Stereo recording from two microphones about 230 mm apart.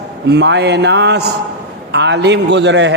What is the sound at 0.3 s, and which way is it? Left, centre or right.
A man's voice, right.